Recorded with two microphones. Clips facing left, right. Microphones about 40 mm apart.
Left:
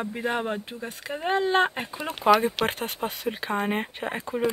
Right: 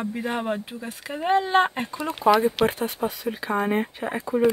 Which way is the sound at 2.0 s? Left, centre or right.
Left.